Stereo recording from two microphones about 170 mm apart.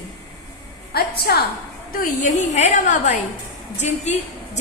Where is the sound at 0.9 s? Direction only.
65° left (ahead or behind).